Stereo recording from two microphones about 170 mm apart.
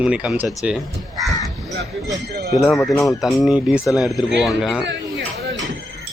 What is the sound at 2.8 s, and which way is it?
Speech, centre (ahead or behind).